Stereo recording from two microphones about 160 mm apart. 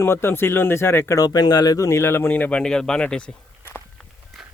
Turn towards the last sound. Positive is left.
turn(degrees=10)  # may be behind; listen again after turning